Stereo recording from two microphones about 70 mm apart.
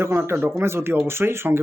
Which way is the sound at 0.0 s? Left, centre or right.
Right.